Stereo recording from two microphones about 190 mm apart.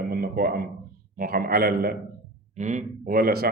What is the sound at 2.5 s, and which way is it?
Speech, 40° right (ahead or behind).